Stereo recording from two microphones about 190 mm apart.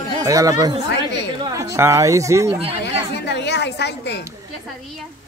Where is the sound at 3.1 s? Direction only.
65° left (ahead or behind).